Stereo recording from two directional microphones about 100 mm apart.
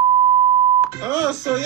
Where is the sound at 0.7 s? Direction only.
35° right (ahead or behind).